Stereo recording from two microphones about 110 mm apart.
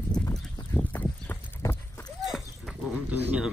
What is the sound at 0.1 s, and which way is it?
Clip-clop, 10° left (ahead or behind).